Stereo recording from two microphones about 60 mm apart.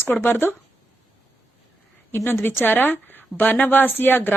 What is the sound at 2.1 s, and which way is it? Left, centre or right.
Speech, left.